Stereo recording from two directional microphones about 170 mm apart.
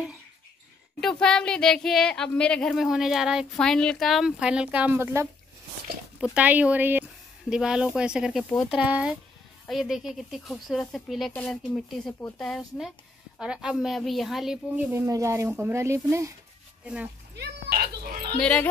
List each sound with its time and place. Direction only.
1.0 s speech: 5° left (ahead or behind); by 5.3 s 15° right (ahead or behind)
6.3 s a woman's voice: 10° right (ahead or behind)
17.4 s a sound: 65° right (ahead or behind)
18.4 s speech: 10° left (ahead or behind)